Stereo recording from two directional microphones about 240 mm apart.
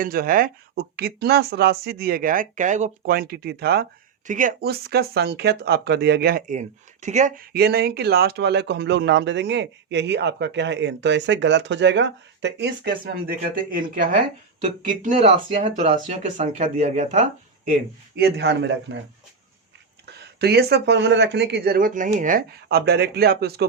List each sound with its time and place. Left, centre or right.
0.0 s speech: right
18.2 s speech: right
20.1 s speech: right